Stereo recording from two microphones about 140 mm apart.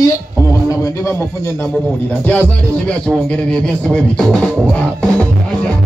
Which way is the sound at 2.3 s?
10° left (ahead or behind).